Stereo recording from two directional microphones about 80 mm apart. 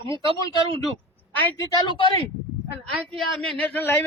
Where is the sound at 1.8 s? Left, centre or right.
Left.